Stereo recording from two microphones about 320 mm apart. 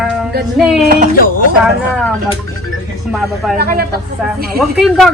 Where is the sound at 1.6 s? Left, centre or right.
Centre.